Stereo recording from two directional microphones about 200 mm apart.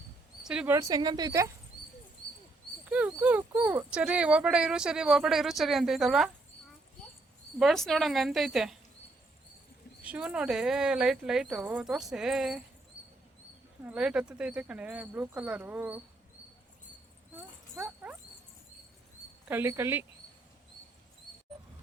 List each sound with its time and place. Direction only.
0.4 s speech: 5° right (ahead or behind)
2.9 s speech: 5° right (ahead or behind)
7.6 s speech: centre (ahead or behind)
10.0 s speech: 5° right (ahead or behind)
13.8 s speech: 5° right (ahead or behind)
17.3 s dog: 10° right (ahead or behind)
19.5 s speech: 10° right (ahead or behind)